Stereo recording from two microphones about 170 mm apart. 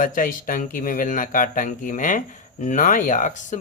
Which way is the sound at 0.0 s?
55° left (ahead or behind).